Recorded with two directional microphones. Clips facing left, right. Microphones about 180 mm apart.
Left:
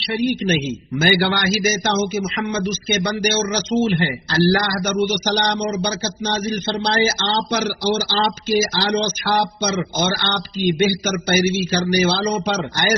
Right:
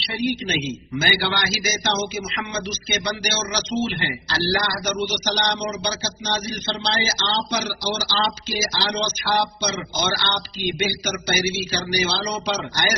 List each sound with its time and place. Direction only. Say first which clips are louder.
0.0 s a man's voice: left 5 dB; 50° left (ahead or behind)